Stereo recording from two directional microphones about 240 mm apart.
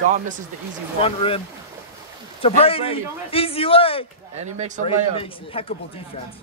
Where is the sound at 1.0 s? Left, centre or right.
Left.